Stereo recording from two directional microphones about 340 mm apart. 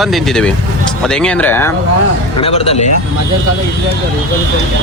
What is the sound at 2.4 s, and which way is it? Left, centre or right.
Speech, centre.